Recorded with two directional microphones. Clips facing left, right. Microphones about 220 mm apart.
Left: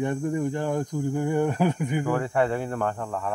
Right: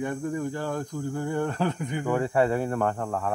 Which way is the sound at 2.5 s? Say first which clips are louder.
Right 2 dB; 40° right (ahead or behind).